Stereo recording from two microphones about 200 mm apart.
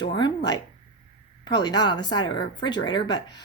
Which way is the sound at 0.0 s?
20° left (ahead or behind).